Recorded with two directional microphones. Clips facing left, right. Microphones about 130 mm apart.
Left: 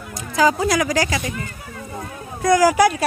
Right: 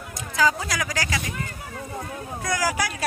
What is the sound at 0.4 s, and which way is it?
Speech, 20° left (ahead or behind).